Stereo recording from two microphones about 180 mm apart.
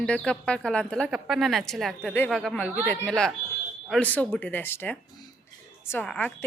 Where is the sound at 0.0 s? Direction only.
5° left (ahead or behind).